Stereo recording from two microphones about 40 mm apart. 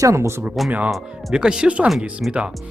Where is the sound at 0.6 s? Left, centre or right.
Centre.